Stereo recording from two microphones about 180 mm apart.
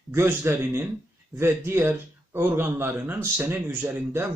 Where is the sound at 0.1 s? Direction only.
15° right (ahead or behind).